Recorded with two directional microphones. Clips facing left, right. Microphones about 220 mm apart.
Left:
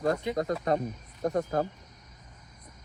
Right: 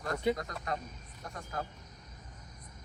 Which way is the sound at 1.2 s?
40° left (ahead or behind).